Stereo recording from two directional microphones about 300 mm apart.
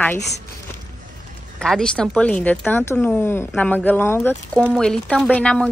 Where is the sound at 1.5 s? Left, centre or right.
Centre.